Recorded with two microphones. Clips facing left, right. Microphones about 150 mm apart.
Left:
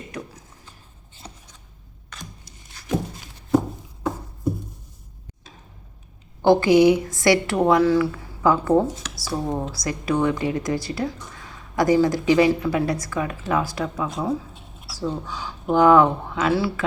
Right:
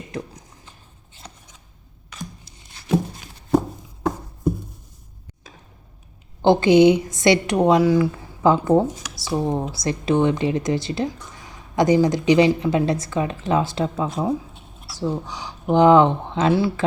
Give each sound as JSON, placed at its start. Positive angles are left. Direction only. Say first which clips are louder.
{"t": 1.2, "sound": "chopping", "louder": "left 1 dB", "side_deg": 10}
{"t": 6.4, "sound": "speech", "louder": "right 1 dB", "side_deg": -20}